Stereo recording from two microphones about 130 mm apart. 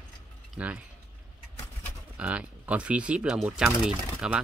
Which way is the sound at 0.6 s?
10° right (ahead or behind).